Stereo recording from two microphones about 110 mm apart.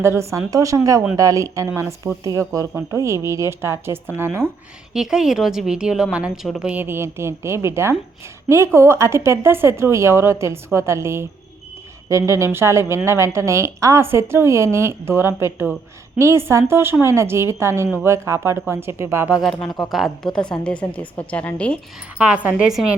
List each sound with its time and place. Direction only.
0.0 s speech: 25° right (ahead or behind)
4.9 s a woman's voice: 5° right (ahead or behind); by 19.3 s 25° right (ahead or behind)
19.3 s a woman's voice: centre (ahead or behind)
22.2 s a woman's voice: 10° right (ahead or behind)